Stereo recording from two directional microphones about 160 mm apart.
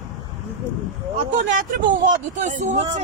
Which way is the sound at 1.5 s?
55° right (ahead or behind).